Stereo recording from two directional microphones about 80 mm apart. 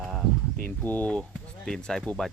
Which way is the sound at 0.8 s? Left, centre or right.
Left.